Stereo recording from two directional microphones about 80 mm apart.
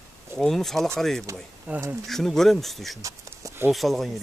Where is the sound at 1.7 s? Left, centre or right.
Centre.